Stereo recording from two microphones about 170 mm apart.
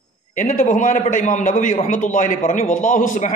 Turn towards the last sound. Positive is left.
turn(degrees=50)  # may be behind; listen again after turning